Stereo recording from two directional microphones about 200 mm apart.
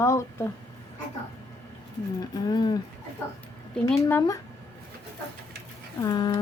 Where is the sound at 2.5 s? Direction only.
20° left (ahead or behind).